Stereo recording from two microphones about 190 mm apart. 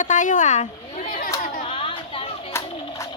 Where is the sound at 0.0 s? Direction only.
40° left (ahead or behind).